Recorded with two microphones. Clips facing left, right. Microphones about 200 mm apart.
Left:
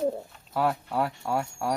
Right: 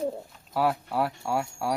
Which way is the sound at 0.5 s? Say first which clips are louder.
Right 1 dB; 5° right (ahead or behind).